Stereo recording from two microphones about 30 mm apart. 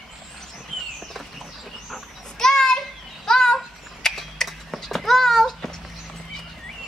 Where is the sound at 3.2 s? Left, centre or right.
Centre.